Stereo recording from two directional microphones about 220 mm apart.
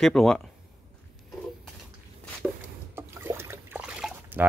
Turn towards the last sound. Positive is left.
turn(degrees=-5)  # may be behind; listen again after turning